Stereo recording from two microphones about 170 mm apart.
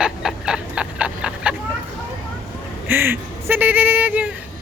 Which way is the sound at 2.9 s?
15° right (ahead or behind).